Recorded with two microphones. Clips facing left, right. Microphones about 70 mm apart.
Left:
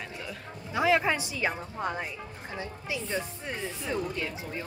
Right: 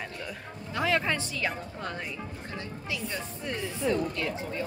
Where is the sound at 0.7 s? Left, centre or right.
Centre.